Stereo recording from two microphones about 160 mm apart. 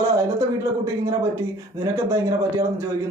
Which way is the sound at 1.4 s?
15° right (ahead or behind).